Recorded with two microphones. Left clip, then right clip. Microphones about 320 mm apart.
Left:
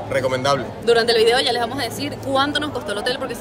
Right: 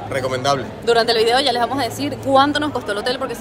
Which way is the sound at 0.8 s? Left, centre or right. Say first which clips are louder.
Even; centre.